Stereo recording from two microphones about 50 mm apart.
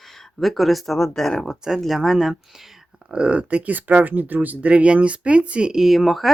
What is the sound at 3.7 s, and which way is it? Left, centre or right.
Speech, right.